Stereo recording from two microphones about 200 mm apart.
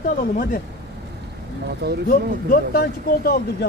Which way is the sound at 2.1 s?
50° left (ahead or behind).